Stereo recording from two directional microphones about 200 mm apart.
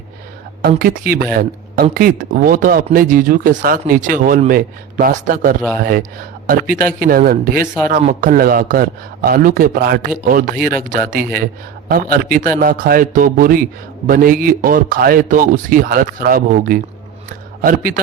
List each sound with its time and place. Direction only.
0.6 s speech: 45° right (ahead or behind)